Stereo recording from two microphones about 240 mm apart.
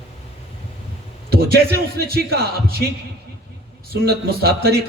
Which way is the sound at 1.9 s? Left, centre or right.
Right.